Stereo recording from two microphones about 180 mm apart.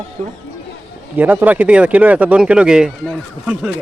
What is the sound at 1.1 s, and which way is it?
Speech, 10° right (ahead or behind).